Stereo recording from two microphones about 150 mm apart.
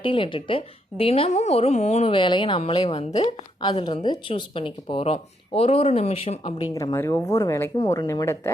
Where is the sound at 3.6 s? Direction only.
30° left (ahead or behind).